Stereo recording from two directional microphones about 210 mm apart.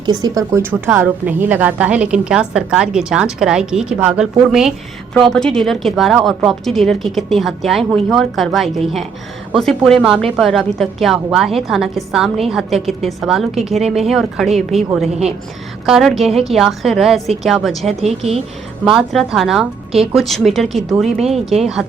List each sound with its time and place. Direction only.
0.0 s a woman's voice: 20° right (ahead or behind); by 20.8 s centre (ahead or behind)
21.2 s speech: 30° right (ahead or behind)